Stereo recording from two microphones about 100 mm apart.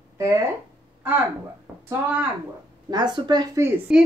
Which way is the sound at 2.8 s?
45° right (ahead or behind).